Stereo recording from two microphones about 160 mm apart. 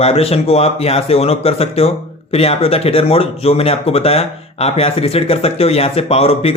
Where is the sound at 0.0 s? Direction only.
40° left (ahead or behind).